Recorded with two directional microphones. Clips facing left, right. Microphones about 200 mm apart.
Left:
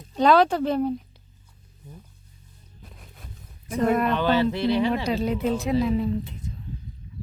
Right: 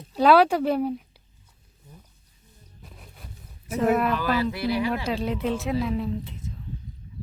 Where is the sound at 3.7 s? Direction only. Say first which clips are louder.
Even; 5° right (ahead or behind).